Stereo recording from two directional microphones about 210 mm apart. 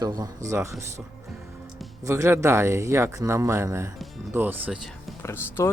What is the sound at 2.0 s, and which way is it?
Speech, 15° right (ahead or behind).